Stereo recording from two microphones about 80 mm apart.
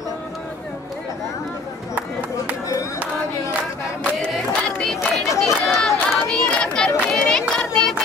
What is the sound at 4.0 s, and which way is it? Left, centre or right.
Crowd, centre.